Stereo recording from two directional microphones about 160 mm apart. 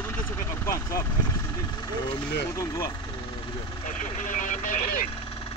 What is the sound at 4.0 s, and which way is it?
Speech, 55° left (ahead or behind).